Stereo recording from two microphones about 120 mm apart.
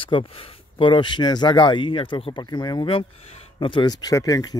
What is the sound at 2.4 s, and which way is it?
Speech, 35° left (ahead or behind).